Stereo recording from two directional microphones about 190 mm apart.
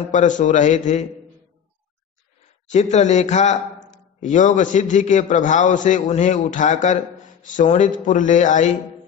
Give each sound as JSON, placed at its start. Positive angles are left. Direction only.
{"t": 0.1, "sound": "speech", "side_deg": 40}
{"t": 2.7, "sound": "speech", "side_deg": 40}